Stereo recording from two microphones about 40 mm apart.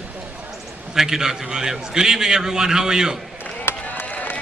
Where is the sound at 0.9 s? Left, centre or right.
Centre.